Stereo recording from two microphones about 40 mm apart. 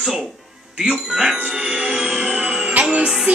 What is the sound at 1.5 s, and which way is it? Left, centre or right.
Music, centre.